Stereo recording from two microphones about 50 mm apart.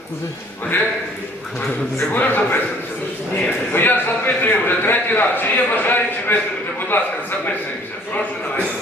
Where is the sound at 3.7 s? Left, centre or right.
Left.